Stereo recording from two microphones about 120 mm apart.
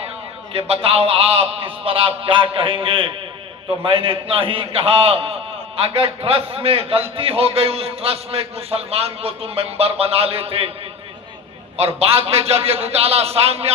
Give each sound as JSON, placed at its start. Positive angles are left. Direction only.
{"t": 0.5, "sound": "a man's voice", "side_deg": -55}
{"t": 11.8, "sound": "a man's voice", "side_deg": -60}